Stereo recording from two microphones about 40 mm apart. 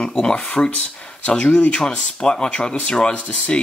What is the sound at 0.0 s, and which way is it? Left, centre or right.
Speech, centre.